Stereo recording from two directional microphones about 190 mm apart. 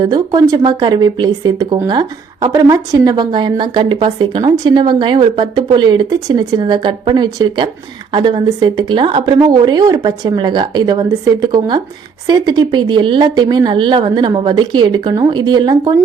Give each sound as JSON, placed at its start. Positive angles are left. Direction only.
{"t": 0.0, "sound": "speech", "side_deg": -20}